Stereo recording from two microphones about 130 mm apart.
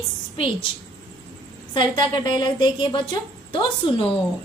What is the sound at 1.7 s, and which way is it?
A woman's voice, 35° left (ahead or behind).